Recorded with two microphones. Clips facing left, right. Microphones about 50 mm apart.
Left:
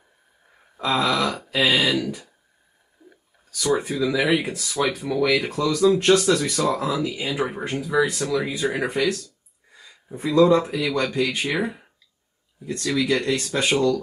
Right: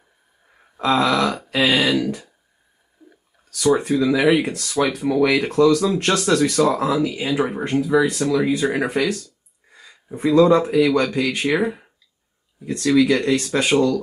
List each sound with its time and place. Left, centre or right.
0.7 s speech: centre
3.5 s speech: centre